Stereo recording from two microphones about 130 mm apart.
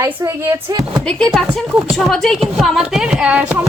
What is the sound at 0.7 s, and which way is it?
Speech, 35° right (ahead or behind).